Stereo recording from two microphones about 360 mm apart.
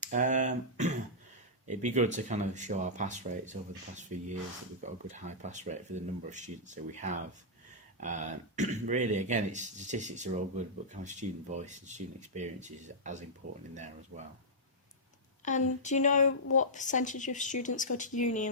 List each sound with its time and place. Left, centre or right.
0.0 s a sound: centre
1.6 s speech: centre
15.4 s speech: centre